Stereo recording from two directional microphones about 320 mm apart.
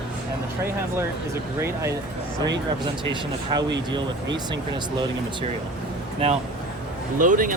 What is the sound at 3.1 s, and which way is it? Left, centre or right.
Speech, centre.